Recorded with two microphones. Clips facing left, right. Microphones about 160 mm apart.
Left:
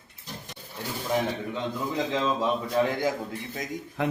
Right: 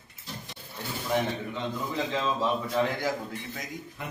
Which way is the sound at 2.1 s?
10° left (ahead or behind).